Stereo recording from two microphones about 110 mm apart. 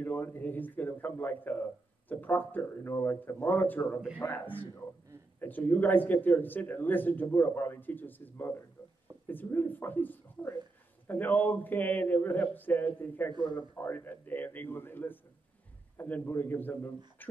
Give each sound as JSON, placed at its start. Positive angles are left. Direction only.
{"t": 0.0, "sound": "a man's voice", "side_deg": 15}